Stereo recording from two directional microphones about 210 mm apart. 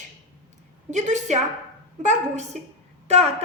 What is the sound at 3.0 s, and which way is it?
Speech, 30° right (ahead or behind).